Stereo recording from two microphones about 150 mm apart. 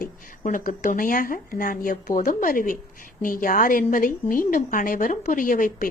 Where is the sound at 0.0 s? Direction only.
65° left (ahead or behind).